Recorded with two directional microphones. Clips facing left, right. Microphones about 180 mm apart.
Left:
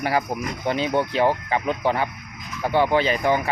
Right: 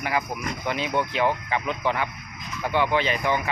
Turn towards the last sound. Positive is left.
turn(degrees=35)  # may be behind; listen again after turning